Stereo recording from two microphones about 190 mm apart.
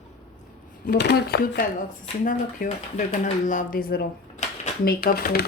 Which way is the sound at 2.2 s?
40° left (ahead or behind).